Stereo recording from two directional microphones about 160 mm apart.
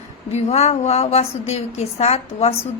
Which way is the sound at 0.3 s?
40° left (ahead or behind).